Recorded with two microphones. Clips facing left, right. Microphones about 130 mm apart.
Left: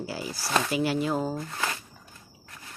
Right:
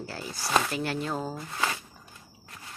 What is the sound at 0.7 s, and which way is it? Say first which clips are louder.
Speech: left 5 dB; 5° left (ahead or behind).